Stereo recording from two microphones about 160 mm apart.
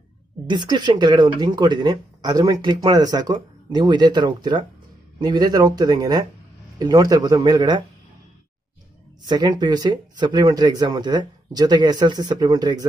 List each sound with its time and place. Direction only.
0.5 s speech: 30° right (ahead or behind)
9.2 s speech: 25° right (ahead or behind)